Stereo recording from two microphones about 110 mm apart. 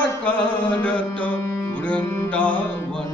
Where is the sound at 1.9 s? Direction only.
10° left (ahead or behind).